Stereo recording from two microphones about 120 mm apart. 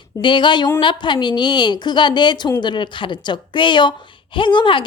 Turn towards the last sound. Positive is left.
turn(degrees=40)  # may be behind; listen again after turning